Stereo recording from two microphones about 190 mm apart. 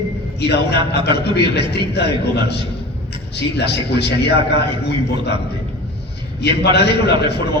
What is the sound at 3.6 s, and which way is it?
A man's voice, 60° left (ahead or behind).